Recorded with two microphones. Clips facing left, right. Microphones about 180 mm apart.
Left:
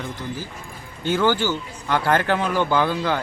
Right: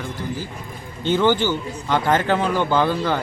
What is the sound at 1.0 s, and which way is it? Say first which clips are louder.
Speech: right 2 dB; 20° right (ahead or behind).